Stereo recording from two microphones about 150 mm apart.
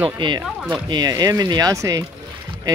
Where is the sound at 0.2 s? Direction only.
30° right (ahead or behind).